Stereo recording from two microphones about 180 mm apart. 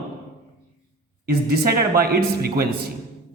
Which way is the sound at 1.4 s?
55° right (ahead or behind).